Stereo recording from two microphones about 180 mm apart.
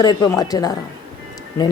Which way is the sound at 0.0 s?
20° left (ahead or behind).